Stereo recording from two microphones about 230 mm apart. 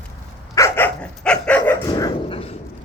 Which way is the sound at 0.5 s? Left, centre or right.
Centre.